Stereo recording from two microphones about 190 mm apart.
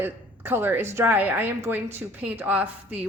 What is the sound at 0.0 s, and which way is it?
A woman's voice, 10° right (ahead or behind).